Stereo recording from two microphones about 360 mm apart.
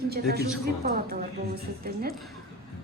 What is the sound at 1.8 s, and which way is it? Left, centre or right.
Speech, right.